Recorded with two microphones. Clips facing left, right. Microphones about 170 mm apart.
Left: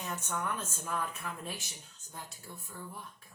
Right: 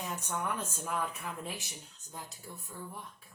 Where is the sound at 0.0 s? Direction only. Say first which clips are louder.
Even; 15° right (ahead or behind).